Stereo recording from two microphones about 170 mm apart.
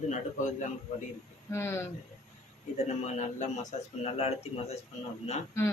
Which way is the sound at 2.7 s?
45° left (ahead or behind).